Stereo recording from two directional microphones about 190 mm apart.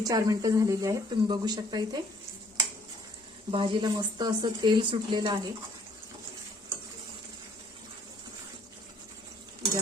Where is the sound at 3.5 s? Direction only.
25° right (ahead or behind).